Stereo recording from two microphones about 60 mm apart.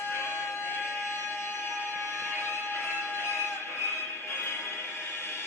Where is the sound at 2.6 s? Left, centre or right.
Left.